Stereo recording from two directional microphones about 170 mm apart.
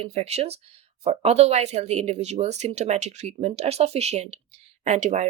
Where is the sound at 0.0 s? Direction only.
35° right (ahead or behind).